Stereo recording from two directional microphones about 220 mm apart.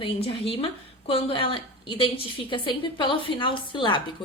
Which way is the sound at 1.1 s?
25° left (ahead or behind).